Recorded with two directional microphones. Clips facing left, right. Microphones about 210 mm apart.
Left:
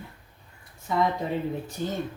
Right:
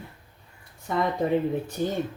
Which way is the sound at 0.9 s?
55° right (ahead or behind).